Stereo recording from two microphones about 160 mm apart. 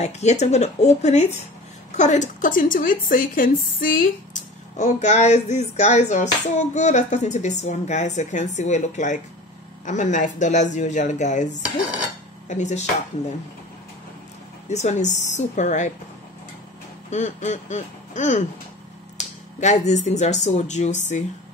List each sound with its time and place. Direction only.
0.0 s speech: 45° left (ahead or behind)
12.4 s speech: 50° left (ahead or behind)
14.7 s speech: 45° left (ahead or behind)
17.1 s speech: 45° left (ahead or behind)